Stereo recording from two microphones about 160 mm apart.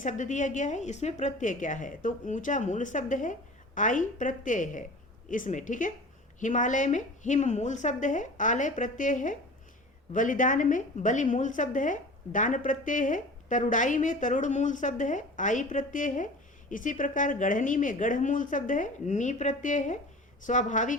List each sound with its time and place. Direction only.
0.0 s a woman's voice: 50° left (ahead or behind)